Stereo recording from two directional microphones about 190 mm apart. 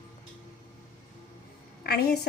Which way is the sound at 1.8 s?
55° left (ahead or behind).